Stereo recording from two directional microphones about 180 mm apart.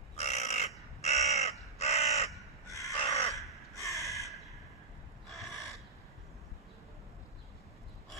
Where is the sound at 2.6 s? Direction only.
15° left (ahead or behind).